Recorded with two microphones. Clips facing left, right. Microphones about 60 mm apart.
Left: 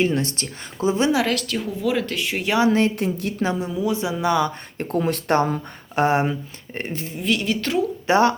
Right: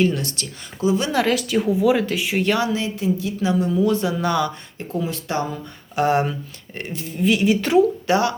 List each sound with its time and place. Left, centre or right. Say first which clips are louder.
0.0 s speech: right 1 dB; left
1.1 s a woman's voice: right 2 dB; centre
2.6 s a woman's voice: left 3 dB; left
3.6 s speech: right 4 dB; centre
4.8 s speech: left 4 dB; left
7.2 s speech: right 5 dB; centre
8.0 s speech: left 2 dB; left